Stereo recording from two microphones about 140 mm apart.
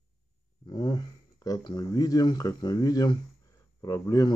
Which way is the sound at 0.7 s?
30° left (ahead or behind).